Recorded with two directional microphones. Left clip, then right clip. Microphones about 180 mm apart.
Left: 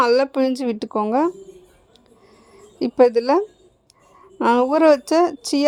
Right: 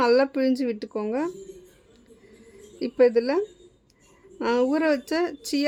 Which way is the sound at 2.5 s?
40° left (ahead or behind).